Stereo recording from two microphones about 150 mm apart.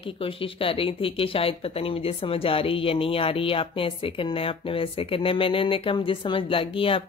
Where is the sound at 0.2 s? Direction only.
40° left (ahead or behind).